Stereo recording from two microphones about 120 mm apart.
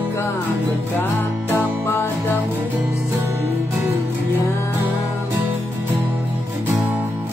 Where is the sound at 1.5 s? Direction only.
20° left (ahead or behind).